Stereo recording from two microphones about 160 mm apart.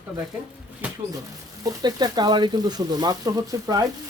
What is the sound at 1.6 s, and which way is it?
Speech, 25° right (ahead or behind).